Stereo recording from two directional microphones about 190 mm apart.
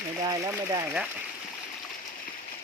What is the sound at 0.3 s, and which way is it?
Speech, 15° right (ahead or behind).